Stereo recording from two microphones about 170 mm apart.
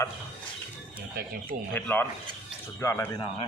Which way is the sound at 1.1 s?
60° right (ahead or behind).